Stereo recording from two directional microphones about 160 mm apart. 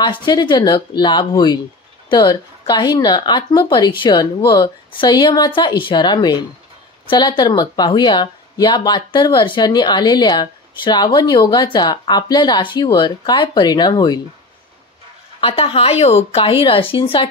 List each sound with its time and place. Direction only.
0.0 s speech: 30° left (ahead or behind)
15.4 s a woman's voice: 35° left (ahead or behind)